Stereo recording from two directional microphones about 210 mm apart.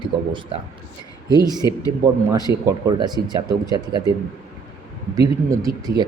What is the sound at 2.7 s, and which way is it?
Speech, 15° right (ahead or behind).